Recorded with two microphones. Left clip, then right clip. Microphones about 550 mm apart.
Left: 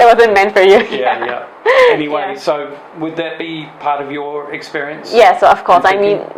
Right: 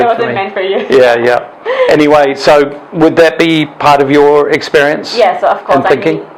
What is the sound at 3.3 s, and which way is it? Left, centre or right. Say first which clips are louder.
Speech: right 14 dB; right.